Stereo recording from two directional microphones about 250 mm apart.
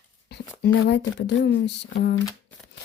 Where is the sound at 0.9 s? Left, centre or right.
Left.